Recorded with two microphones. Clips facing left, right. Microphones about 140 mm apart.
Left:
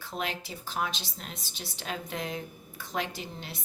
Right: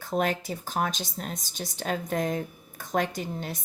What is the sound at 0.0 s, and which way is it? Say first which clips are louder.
A woman's voice: right 8 dB; 45° right (ahead or behind).